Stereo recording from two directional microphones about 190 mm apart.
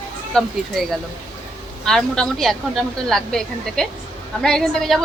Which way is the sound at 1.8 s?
5° left (ahead or behind).